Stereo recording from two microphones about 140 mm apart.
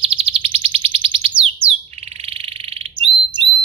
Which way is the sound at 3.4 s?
35° right (ahead or behind).